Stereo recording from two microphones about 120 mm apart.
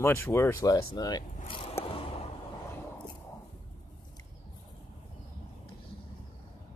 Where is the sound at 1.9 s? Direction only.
50° left (ahead or behind).